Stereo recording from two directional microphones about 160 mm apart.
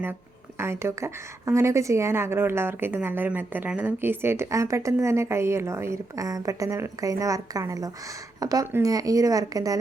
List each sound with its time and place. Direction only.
0.6 s a woman's voice: 15° right (ahead or behind)